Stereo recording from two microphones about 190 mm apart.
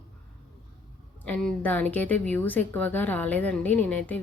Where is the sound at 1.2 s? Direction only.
5° left (ahead or behind).